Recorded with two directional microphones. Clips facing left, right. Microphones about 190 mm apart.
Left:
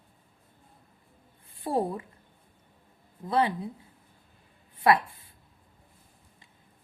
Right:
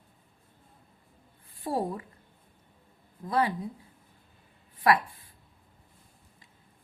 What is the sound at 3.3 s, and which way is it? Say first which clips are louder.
Speech: left 1 dB; 25° left (ahead or behind).